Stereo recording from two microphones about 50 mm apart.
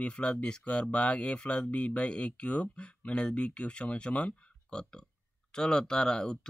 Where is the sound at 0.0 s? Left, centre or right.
Left.